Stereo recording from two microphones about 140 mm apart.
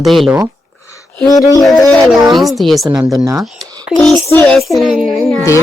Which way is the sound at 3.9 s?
Centre (ahead or behind).